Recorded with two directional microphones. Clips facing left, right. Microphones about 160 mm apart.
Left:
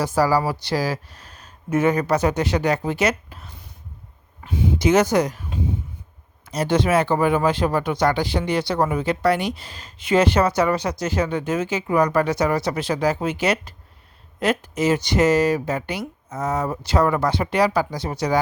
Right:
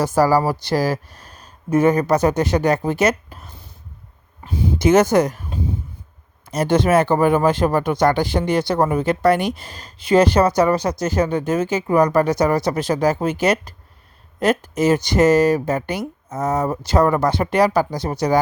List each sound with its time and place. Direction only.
0.0 s speech: 45° right (ahead or behind)
6.4 s speech: 50° right (ahead or behind)